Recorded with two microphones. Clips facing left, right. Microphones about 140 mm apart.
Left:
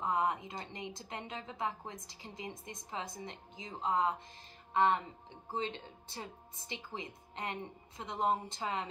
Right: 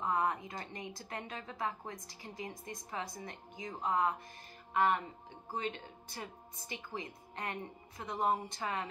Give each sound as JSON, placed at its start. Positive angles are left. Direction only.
{"t": 0.0, "sound": "a woman's voice", "side_deg": 20}